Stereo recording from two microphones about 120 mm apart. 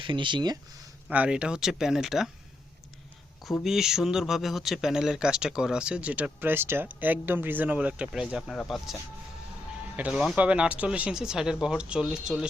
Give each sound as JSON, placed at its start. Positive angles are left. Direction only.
{"t": 0.0, "sound": "speech", "side_deg": -40}
{"t": 1.0, "sound": "speech", "side_deg": -10}
{"t": 3.4, "sound": "speech", "side_deg": 0}
{"t": 10.0, "sound": "speech", "side_deg": -5}